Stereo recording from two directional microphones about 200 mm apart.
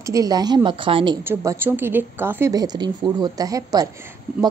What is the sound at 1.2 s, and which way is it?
A woman's voice, 10° right (ahead or behind).